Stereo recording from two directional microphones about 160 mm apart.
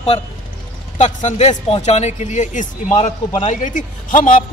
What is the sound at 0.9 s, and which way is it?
Speech, 45° left (ahead or behind).